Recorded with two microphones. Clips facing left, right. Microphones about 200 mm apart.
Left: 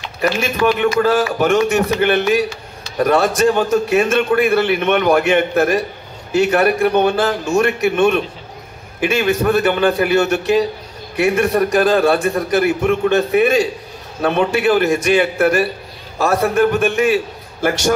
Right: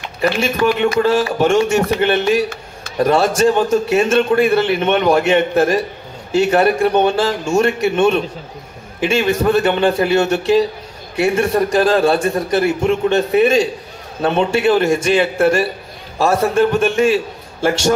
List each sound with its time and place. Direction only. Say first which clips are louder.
0.7 s a man's voice: even; 30° right (ahead or behind)